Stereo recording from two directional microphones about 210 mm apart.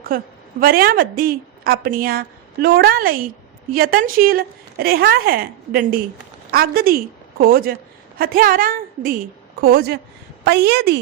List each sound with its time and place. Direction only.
0.1 s a woman's voice: 45° right (ahead or behind)